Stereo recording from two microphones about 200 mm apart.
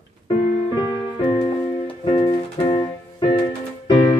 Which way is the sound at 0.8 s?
25° left (ahead or behind).